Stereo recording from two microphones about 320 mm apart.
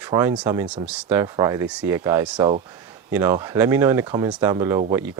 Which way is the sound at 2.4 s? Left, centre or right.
Centre.